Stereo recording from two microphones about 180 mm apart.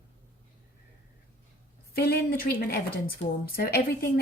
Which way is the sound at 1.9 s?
60° left (ahead or behind).